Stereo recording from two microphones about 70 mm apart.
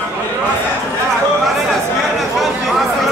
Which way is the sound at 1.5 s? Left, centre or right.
Centre.